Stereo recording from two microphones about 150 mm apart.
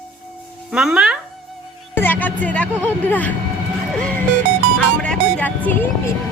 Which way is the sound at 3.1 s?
10° left (ahead or behind).